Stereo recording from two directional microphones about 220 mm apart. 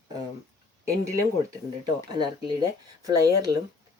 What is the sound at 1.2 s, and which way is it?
Speech, 15° right (ahead or behind).